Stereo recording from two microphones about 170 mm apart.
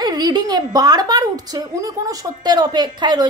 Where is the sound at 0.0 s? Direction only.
25° right (ahead or behind).